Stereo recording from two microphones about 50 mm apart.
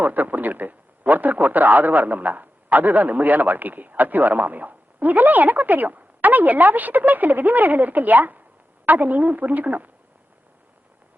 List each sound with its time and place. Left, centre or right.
0.0 s a man's voice: right